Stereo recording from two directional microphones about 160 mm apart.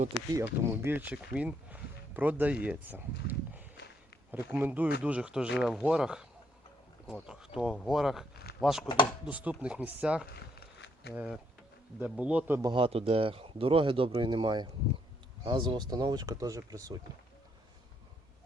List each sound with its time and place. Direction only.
0.3 s speech: 15° right (ahead or behind)
10.8 s a sound: 90° left
11.1 s speech: 5° right (ahead or behind)
12.6 s speech: 35° right (ahead or behind)